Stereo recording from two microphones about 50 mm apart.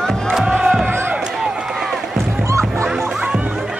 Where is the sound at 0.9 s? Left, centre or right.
Right.